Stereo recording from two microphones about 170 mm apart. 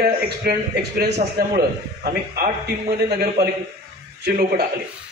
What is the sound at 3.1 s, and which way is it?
A man's voice, 70° right (ahead or behind).